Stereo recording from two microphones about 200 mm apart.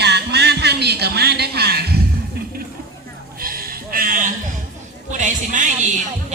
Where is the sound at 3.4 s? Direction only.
45° right (ahead or behind).